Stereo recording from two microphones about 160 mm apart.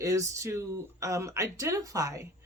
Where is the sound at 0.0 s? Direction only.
20° right (ahead or behind).